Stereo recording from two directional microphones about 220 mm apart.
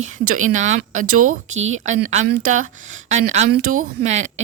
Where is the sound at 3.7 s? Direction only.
35° right (ahead or behind).